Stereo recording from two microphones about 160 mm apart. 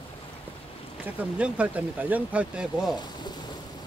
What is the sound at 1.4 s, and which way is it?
Speech, 10° right (ahead or behind).